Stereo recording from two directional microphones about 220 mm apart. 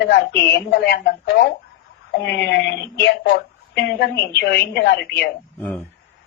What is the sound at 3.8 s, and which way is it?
A woman's voice, 50° left (ahead or behind).